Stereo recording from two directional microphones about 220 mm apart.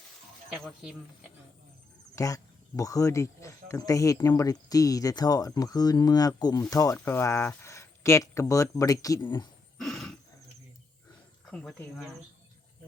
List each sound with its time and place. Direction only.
0.5 s speech: centre (ahead or behind)
2.1 s speech: 15° left (ahead or behind)
9.7 s a sound: centre (ahead or behind)
11.5 s speech: centre (ahead or behind)